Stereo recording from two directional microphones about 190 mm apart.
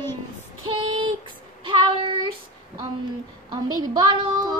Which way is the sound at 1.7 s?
25° right (ahead or behind).